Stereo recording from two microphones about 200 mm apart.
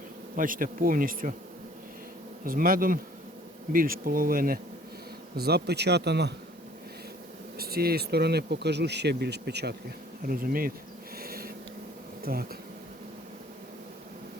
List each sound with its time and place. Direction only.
0.3 s bee: 45° right (ahead or behind)
2.4 s bee: 45° right (ahead or behind)
5.4 s speech: 55° right (ahead or behind)
7.6 s speech: 50° right (ahead or behind)
10.2 s bee: 45° right (ahead or behind)
11.2 s a sound: 50° right (ahead or behind)
12.2 s speech: 50° right (ahead or behind)